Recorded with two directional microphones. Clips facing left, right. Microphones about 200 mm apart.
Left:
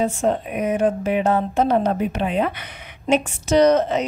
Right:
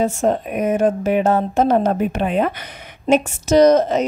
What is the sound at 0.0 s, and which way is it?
A woman's voice, 45° right (ahead or behind).